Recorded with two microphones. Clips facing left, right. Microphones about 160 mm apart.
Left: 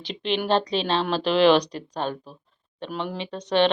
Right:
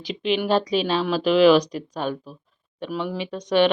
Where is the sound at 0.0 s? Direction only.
5° right (ahead or behind).